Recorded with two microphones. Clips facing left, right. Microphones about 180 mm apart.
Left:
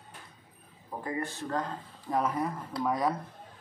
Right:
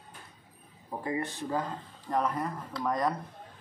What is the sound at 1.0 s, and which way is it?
Speech, 15° right (ahead or behind).